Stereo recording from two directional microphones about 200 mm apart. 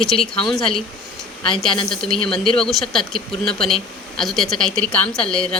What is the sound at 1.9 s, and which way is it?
A woman's voice, 5° left (ahead or behind).